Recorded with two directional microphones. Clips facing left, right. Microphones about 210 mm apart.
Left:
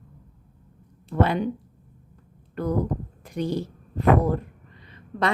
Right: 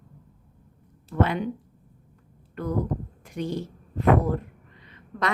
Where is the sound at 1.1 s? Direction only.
35° left (ahead or behind).